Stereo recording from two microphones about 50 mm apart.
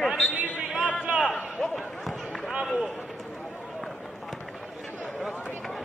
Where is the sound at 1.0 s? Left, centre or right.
Centre.